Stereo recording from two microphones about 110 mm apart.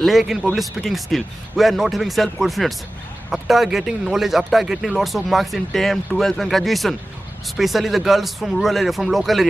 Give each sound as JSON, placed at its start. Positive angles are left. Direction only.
{"t": 0.0, "sound": "speech", "side_deg": 0}